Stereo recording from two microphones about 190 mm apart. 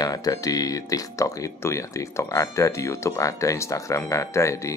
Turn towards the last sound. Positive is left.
turn(degrees=15)  # may be behind; listen again after turning